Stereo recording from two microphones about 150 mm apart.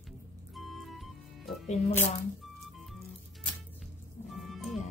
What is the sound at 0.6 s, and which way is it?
Music, centre (ahead or behind).